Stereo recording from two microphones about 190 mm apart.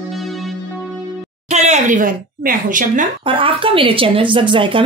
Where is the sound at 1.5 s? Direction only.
40° right (ahead or behind).